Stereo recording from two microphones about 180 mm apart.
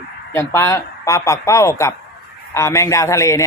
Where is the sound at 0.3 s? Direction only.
15° left (ahead or behind).